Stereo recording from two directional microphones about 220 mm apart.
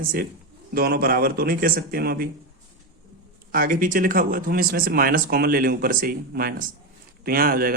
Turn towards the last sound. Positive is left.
turn(degrees=-40)  # may be behind; listen again after turning